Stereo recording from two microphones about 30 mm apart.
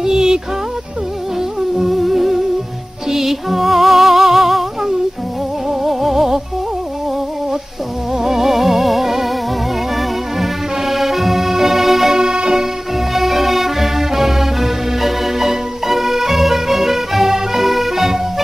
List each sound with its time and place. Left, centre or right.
0.0 s music: centre
1.8 s music: centre
8.2 s music: centre